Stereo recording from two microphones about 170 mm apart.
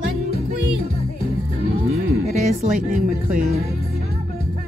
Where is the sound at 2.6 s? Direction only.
50° right (ahead or behind).